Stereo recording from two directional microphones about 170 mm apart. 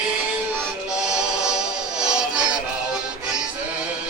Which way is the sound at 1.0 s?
5° right (ahead or behind).